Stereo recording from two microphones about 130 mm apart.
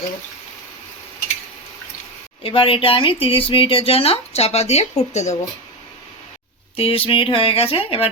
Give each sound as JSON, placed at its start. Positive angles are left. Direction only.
{"t": 2.4, "sound": "speech", "side_deg": 45}
{"t": 6.7, "sound": "speech", "side_deg": 45}